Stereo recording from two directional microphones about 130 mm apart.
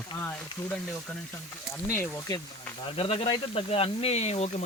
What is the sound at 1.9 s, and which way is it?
Speech, 20° left (ahead or behind).